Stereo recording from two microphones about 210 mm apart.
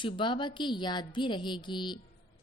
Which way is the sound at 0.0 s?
20° left (ahead or behind).